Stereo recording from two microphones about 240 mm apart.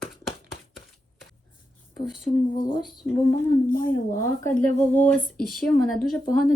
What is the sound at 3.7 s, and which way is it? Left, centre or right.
Speech, left.